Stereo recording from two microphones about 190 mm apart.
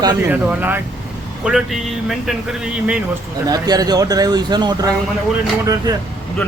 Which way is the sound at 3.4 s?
20° right (ahead or behind).